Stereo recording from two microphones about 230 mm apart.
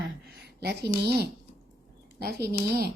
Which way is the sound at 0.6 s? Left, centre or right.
Right.